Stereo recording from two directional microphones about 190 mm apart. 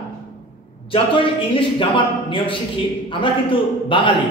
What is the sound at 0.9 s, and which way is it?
A man's voice, 25° left (ahead or behind).